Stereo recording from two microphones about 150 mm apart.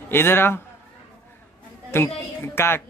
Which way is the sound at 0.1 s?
15° left (ahead or behind).